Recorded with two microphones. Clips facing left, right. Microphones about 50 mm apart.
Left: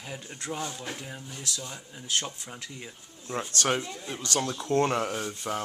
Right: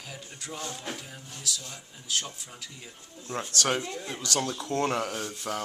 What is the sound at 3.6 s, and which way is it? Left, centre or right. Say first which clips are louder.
Speech: left 1 dB; centre.